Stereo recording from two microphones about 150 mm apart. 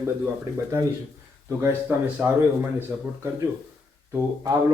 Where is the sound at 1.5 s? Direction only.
10° right (ahead or behind).